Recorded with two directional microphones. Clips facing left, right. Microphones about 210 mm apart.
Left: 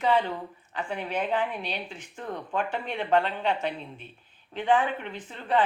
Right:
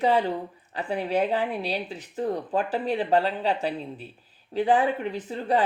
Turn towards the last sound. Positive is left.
turn(degrees=-40)  # may be behind; listen again after turning